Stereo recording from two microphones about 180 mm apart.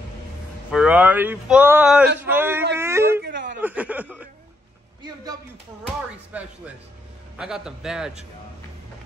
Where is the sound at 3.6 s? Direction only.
10° right (ahead or behind).